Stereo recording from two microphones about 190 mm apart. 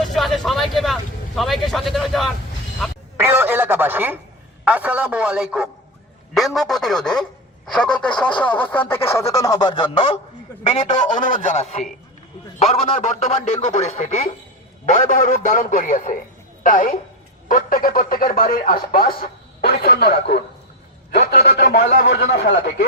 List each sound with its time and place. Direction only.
0.0 s vehicle: centre (ahead or behind)
1.4 s speech: centre (ahead or behind)
3.2 s a man's voice: 15° right (ahead or behind); by 22.9 s 65° left (ahead or behind)